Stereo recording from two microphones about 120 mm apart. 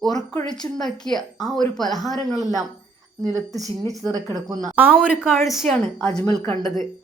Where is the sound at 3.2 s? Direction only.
30° right (ahead or behind).